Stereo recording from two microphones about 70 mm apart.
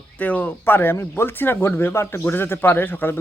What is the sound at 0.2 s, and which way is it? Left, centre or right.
Speech, left.